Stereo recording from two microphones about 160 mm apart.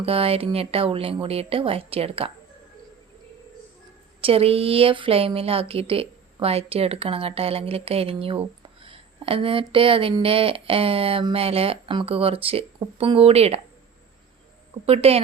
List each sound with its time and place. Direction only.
0.0 s speech: 35° right (ahead or behind)
4.2 s speech: 35° right (ahead or behind)
14.8 s speech: 40° right (ahead or behind)